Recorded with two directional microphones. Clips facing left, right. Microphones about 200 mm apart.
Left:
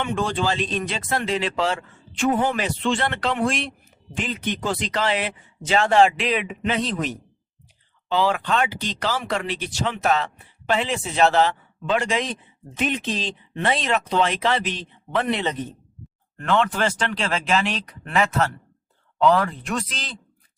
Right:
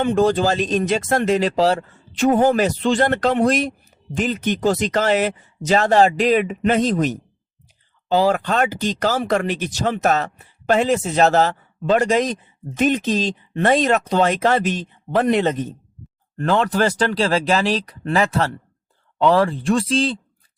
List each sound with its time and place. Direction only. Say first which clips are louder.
0.0 s speech: right 7 dB; 40° right (ahead or behind)